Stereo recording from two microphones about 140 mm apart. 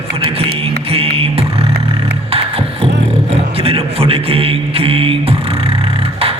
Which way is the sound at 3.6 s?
45° right (ahead or behind).